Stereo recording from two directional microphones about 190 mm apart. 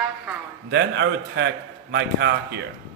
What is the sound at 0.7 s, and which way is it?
A man's voice, 65° right (ahead or behind).